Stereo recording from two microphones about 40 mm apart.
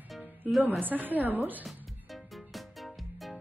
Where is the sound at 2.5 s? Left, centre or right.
Centre.